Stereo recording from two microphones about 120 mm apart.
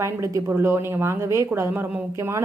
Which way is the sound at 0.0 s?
25° right (ahead or behind).